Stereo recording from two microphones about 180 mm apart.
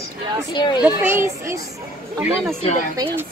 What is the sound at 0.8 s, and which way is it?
Speech, 10° right (ahead or behind).